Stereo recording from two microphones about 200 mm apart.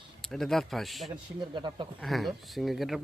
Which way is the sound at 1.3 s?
25° right (ahead or behind).